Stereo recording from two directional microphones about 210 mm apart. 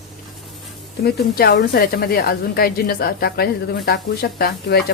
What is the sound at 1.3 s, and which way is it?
A woman's voice, 50° left (ahead or behind).